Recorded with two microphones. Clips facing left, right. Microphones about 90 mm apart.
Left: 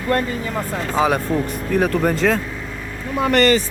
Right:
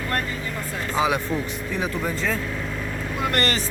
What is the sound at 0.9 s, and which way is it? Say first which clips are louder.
Speech: left 4 dB; 45° left (ahead or behind).